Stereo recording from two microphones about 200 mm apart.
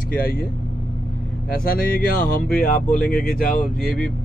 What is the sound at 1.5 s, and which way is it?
Speech, 45° left (ahead or behind).